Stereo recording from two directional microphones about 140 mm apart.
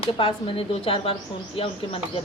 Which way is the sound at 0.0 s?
40° left (ahead or behind).